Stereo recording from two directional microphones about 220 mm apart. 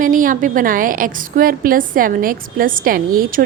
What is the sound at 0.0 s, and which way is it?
A woman's voice, 40° right (ahead or behind).